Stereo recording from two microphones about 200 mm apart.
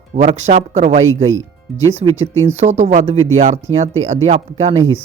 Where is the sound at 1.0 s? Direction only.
85° right.